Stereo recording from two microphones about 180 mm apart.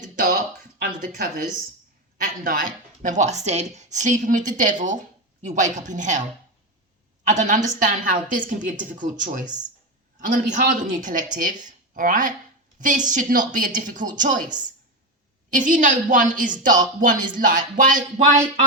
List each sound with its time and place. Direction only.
0.0 s a sound: 45° right (ahead or behind)
0.8 s speech: 50° right (ahead or behind)
7.3 s speech: 45° right (ahead or behind)
15.4 s speech: 45° right (ahead or behind)